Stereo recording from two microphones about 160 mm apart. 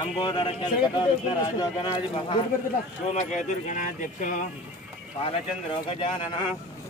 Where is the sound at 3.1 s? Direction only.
45° left (ahead or behind).